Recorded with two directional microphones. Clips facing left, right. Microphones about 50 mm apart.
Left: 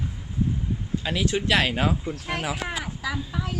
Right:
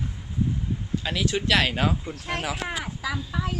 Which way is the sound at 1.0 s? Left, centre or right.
Left.